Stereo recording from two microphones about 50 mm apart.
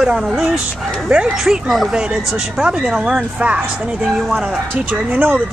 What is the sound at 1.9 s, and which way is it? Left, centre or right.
Speech, centre.